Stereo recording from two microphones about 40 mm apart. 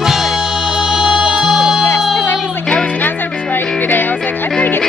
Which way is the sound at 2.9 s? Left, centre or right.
Left.